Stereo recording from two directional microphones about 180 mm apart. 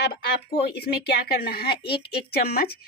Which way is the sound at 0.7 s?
60° left (ahead or behind).